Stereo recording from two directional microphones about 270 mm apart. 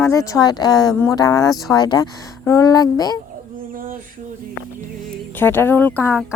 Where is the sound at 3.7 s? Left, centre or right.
Right.